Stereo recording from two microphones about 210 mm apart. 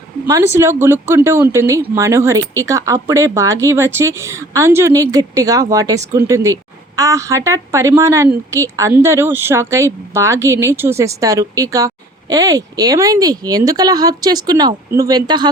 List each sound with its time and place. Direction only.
0.3 s a woman's voice: 15° right (ahead or behind)